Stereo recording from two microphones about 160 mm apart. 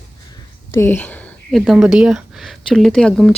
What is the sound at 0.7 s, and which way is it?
Speech, 15° left (ahead or behind).